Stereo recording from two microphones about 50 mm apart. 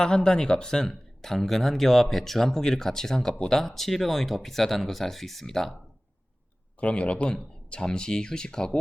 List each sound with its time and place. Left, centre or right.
0.0 s speech: centre
6.7 s speech: left